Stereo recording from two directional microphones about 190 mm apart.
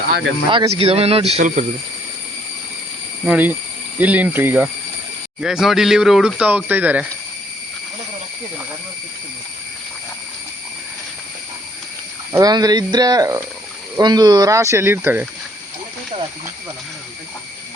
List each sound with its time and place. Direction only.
0.5 s speech: 30° right (ahead or behind)
3.2 s speech: 10° right (ahead or behind)
12.3 s speech: 20° right (ahead or behind)